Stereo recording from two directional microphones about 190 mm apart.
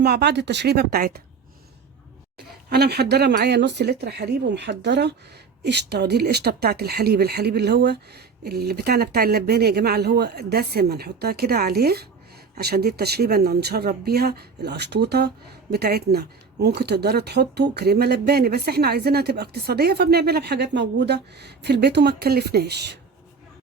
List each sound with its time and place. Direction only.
0.0 s speech: 60° right (ahead or behind)
2.6 s speech: 60° right (ahead or behind)